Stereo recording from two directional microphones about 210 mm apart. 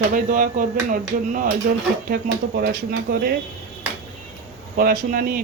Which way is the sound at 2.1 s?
50° right (ahead or behind).